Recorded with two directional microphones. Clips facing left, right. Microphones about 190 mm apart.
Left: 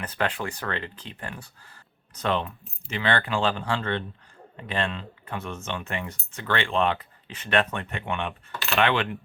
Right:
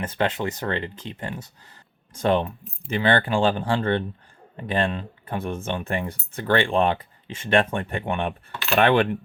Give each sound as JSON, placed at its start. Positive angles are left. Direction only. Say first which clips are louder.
{"t": 0.0, "sound": "speech", "louder": "right 4 dB", "side_deg": -25}
{"t": 5.6, "sound": "speech", "louder": "right 5 dB", "side_deg": -35}
{"t": 8.2, "sound": "speech", "louder": "right 4 dB", "side_deg": -45}